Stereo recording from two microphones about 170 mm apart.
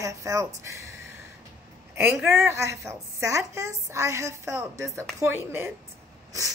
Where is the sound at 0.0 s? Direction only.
20° right (ahead or behind).